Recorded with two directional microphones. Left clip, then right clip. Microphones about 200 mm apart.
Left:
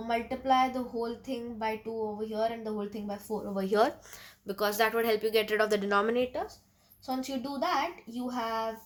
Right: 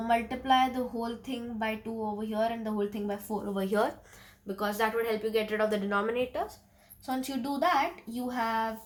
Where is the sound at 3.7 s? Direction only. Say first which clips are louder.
Left 4 dB; 50° left (ahead or behind).